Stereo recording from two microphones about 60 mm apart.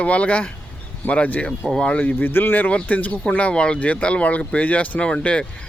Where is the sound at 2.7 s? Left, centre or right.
Left.